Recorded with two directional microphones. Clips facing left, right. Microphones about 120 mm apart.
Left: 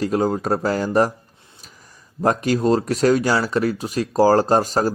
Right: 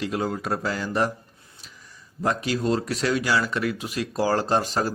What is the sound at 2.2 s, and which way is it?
Speech, 45° left (ahead or behind).